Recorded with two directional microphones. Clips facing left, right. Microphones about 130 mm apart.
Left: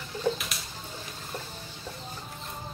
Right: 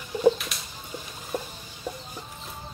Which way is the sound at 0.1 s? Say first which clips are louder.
Right 9 dB; 15° right (ahead or behind).